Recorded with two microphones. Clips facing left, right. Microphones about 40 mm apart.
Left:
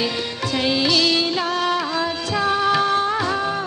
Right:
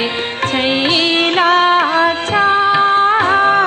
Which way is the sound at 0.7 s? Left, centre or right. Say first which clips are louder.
Right 2 dB; right.